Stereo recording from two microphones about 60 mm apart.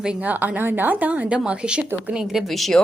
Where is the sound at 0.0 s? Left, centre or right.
Centre.